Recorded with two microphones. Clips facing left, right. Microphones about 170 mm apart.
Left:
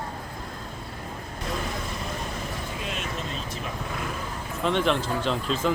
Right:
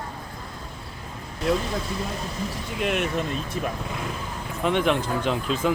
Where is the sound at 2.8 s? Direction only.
65° right (ahead or behind).